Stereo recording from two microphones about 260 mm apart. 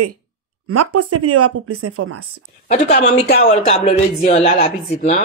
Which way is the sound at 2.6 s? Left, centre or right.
Left.